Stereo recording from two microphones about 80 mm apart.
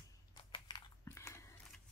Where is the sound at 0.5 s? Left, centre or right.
Left.